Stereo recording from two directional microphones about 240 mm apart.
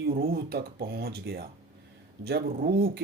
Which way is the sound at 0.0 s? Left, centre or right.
Right.